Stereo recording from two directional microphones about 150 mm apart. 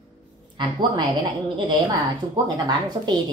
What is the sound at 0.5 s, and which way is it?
Speech, 30° right (ahead or behind).